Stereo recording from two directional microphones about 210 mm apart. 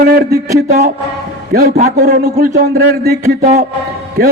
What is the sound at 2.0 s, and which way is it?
A man's voice, 50° right (ahead or behind).